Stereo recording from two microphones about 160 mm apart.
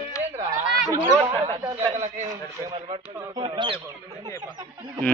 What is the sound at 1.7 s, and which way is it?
Speech, 15° right (ahead or behind).